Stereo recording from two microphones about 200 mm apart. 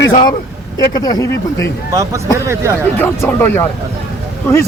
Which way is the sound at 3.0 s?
10° left (ahead or behind).